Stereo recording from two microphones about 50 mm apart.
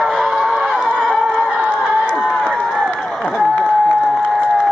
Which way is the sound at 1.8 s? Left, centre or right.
Centre.